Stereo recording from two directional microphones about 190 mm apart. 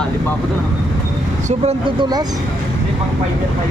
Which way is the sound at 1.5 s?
35° right (ahead or behind).